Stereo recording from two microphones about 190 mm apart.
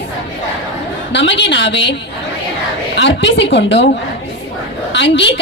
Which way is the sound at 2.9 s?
70° left (ahead or behind).